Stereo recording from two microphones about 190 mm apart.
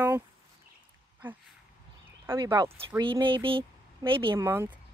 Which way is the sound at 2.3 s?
20° right (ahead or behind).